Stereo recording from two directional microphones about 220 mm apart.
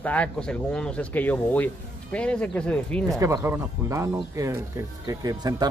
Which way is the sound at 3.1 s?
15° right (ahead or behind).